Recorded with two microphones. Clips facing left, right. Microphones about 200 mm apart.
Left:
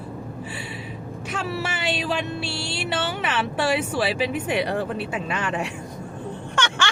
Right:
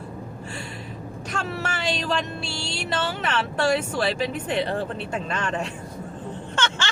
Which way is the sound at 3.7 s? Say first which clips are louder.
Left 1 dB; 10° left (ahead or behind).